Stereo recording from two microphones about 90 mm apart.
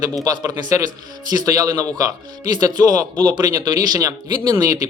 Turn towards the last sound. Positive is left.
turn(degrees=-40)  # may be behind; listen again after turning